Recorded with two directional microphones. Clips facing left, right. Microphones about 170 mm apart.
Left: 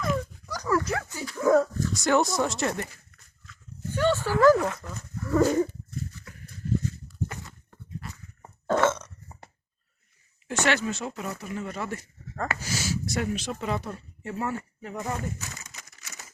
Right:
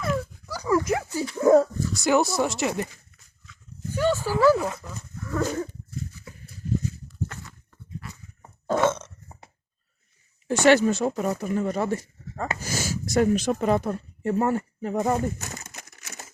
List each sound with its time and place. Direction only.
0.0 s dog: 5° right (ahead or behind); by 1.6 s 25° right (ahead or behind)
1.9 s speech: 5° right (ahead or behind)
3.4 s dog: centre (ahead or behind)
3.9 s a sound: 10° right (ahead or behind)
4.5 s speech: 15° right (ahead or behind)
5.3 s dog: 10° left (ahead or behind)
7.3 s a sound: 10° left (ahead or behind)
8.6 s burping: 15° right (ahead or behind)
10.6 s speech: 40° right (ahead or behind)
12.5 s speech: 45° right (ahead or behind)